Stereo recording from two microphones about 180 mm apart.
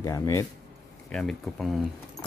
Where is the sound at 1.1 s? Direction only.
Centre (ahead or behind).